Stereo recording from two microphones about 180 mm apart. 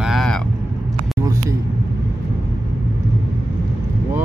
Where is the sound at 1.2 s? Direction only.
20° right (ahead or behind).